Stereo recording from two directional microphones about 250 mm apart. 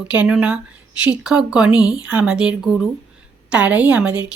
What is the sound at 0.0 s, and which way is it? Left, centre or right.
A woman's voice, centre.